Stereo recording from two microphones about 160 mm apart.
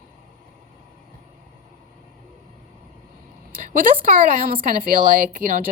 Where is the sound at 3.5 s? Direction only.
60° right (ahead or behind).